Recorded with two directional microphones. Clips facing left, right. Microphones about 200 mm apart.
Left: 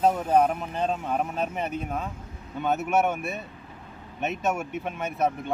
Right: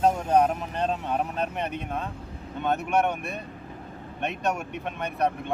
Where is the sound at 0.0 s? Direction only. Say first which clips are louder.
Even; 5° left (ahead or behind).